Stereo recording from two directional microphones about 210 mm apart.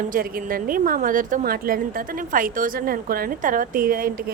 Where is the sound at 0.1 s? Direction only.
40° right (ahead or behind).